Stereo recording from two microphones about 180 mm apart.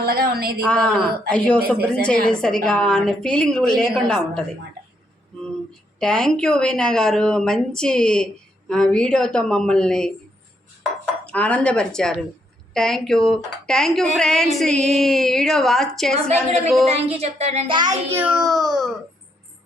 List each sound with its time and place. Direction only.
0.0 s speech: 60° right (ahead or behind)
0.7 s speech: 5° left (ahead or behind)
6.0 s speech: 5° left (ahead or behind)
11.3 s speech: 5° left (ahead or behind)
16.3 s a woman's voice: 35° right (ahead or behind)
18.1 s speech: 10° right (ahead or behind)